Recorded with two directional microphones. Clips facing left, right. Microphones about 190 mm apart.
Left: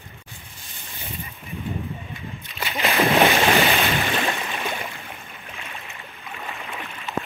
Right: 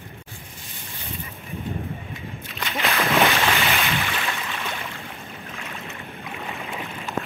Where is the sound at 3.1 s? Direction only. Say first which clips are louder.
Left 2 dB; 30° left (ahead or behind).